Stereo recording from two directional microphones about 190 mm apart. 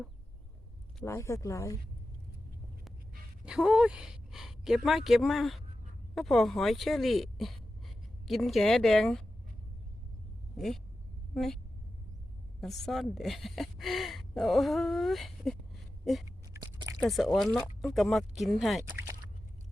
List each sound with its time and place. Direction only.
1.0 s speech: 15° left (ahead or behind)
3.4 s a woman's voice: 5° right (ahead or behind)
11.3 s speech: centre (ahead or behind)
16.5 s chewing: 15° right (ahead or behind)
17.0 s speech: centre (ahead or behind)